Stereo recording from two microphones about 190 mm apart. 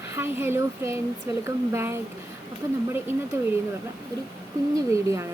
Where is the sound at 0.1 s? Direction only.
10° right (ahead or behind).